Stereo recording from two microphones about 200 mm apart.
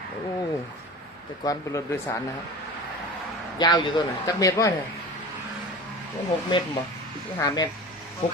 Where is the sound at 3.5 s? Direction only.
20° left (ahead or behind).